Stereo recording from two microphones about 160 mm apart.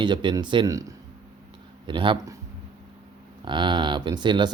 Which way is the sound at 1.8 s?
30° right (ahead or behind).